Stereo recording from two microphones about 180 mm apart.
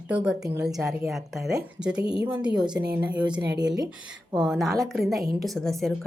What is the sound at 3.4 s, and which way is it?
Speech, 70° right (ahead or behind).